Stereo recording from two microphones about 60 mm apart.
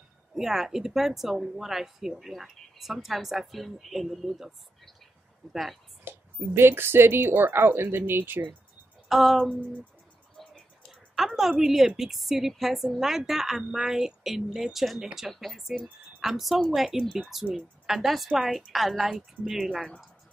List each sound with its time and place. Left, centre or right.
0.3 s speech: centre
6.1 s a sound: right
6.5 s speech: right
9.1 s speech: centre
10.3 s a sound: centre
10.9 s speech: centre